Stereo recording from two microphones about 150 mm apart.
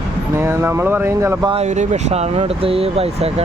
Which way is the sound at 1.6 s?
50° right (ahead or behind).